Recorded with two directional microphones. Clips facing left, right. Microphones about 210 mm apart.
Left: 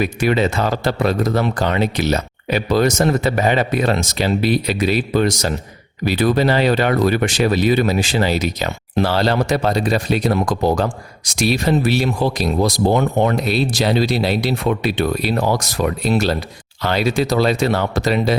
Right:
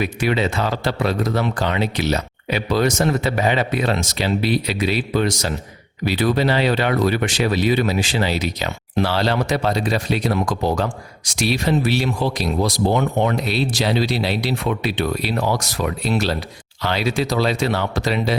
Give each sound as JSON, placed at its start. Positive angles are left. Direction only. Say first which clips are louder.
{"t": 0.0, "sound": "speech", "louder": "left 3 dB", "side_deg": 45}